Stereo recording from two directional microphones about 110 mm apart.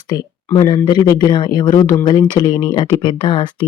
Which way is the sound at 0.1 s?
40° left (ahead or behind).